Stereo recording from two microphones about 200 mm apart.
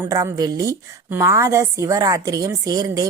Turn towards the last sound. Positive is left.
turn(degrees=-20)  # may be behind; listen again after turning